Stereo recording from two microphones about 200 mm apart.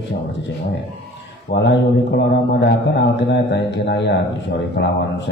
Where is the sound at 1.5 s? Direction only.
60° left (ahead or behind).